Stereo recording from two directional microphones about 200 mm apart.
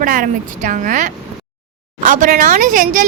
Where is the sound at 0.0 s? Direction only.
45° right (ahead or behind).